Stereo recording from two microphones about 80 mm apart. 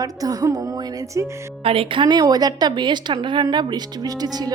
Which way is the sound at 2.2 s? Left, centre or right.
Right.